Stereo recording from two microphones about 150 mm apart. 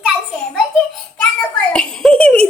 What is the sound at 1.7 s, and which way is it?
Giggle, 5° left (ahead or behind).